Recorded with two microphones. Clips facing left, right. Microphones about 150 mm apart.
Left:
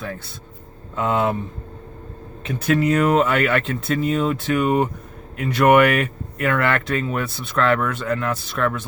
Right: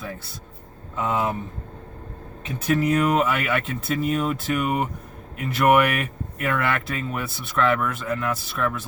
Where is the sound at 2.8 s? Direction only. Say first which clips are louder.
Left 3 dB; 90° left.